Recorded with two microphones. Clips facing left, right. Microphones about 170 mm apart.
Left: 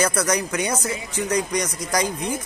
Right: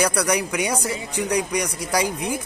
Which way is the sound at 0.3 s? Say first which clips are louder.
Right 1 dB; 15° right (ahead or behind).